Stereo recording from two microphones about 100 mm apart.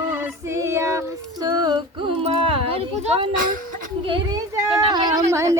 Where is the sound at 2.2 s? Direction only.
70° right (ahead or behind).